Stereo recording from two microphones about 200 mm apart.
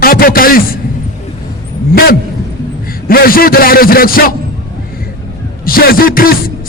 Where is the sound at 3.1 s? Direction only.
45° left (ahead or behind).